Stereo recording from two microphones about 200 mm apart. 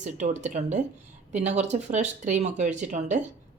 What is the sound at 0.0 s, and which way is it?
Speech, 35° right (ahead or behind).